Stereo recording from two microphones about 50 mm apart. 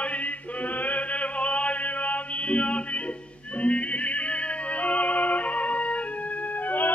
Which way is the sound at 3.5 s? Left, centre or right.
Left.